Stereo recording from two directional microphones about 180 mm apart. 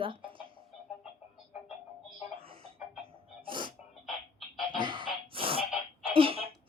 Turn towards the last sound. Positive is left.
turn(degrees=-30)  # may be behind; listen again after turning